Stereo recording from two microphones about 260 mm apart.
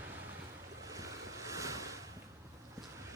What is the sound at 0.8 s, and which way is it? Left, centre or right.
Ocean, centre.